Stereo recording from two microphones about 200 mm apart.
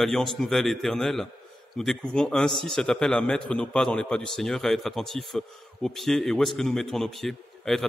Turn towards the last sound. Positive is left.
turn(degrees=0)  # may be behind; listen again after turning